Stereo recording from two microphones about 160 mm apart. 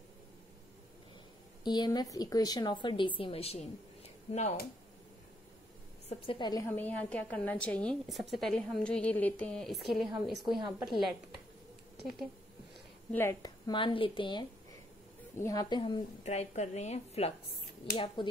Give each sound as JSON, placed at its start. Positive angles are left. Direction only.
{"t": 1.6, "sound": "a woman's voice", "side_deg": 25}
{"t": 6.0, "sound": "speech", "side_deg": 30}
{"t": 6.7, "sound": "a woman's voice", "side_deg": 10}
{"t": 12.0, "sound": "speech", "side_deg": 0}
{"t": 13.1, "sound": "speech", "side_deg": 15}
{"t": 15.3, "sound": "speech", "side_deg": 20}
{"t": 15.8, "sound": "a woman's voice", "side_deg": 40}
{"t": 17.9, "sound": "speech", "side_deg": 30}